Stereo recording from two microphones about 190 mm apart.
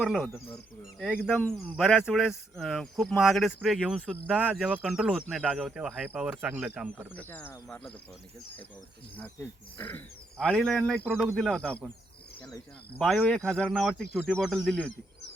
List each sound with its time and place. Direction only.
0.0 s speech: centre (ahead or behind)
7.1 s speech: 10° left (ahead or behind)
9.7 s speech: 10° left (ahead or behind)
11.1 s speech: 10° right (ahead or behind)
11.3 s speech: 5° left (ahead or behind)
12.4 s speech: 15° left (ahead or behind)
13.0 s speech: centre (ahead or behind)